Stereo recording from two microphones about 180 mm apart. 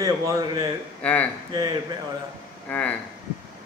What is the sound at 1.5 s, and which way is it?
Speech, 20° right (ahead or behind).